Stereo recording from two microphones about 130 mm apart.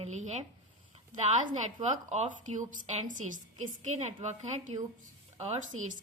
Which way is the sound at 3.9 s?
60° right (ahead or behind).